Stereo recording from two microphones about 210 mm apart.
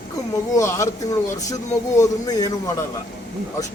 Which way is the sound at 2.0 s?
20° left (ahead or behind).